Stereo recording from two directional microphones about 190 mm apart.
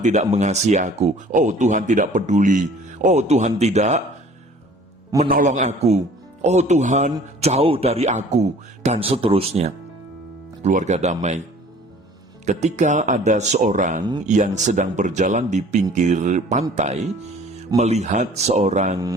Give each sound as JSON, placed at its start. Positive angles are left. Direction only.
{"t": 0.0, "sound": "speech", "side_deg": -35}
{"t": 5.3, "sound": "speech", "side_deg": -40}
{"t": 12.5, "sound": "speech", "side_deg": -35}